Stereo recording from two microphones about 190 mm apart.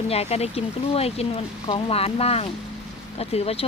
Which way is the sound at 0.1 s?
35° left (ahead or behind).